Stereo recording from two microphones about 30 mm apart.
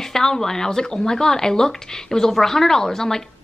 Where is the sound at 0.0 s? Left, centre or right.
Centre.